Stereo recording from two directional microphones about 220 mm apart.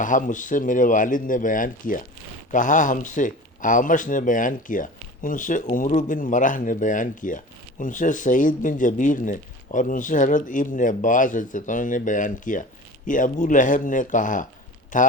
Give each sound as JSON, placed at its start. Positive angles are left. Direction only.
{"t": 0.0, "sound": "a man's voice", "side_deg": 35}